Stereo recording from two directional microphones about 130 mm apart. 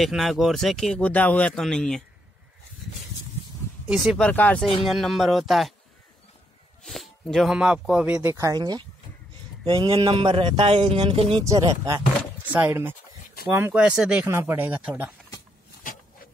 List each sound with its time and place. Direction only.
0.0 s speech: centre (ahead or behind)
3.8 s speech: 5° right (ahead or behind)
4.2 s speech: 10° left (ahead or behind)
4.8 s speech: centre (ahead or behind)
6.8 s speech: 5° left (ahead or behind); by 8.8 s 30° right (ahead or behind)
9.7 s a sound: 40° right (ahead or behind)
11.4 s speech: 30° right (ahead or behind)
12.5 s speech: 15° right (ahead or behind)